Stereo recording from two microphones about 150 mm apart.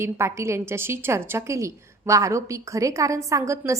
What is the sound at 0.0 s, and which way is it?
A woman's voice, 15° right (ahead or behind).